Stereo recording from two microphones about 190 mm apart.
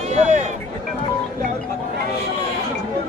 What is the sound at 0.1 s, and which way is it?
Speech, 35° right (ahead or behind).